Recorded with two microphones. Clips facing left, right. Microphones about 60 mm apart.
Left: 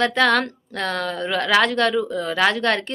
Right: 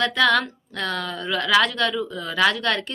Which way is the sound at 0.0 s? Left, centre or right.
Left.